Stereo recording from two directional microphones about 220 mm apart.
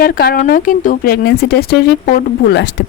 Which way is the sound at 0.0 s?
45° left (ahead or behind).